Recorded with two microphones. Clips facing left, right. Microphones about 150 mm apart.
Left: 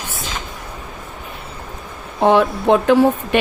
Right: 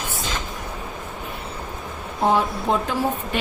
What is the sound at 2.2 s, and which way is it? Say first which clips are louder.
Speech: left 6 dB; 80° left.